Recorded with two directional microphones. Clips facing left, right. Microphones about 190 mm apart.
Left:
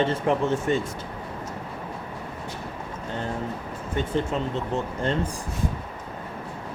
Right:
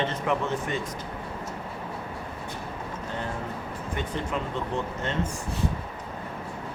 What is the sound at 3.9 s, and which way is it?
Speech, 25° left (ahead or behind).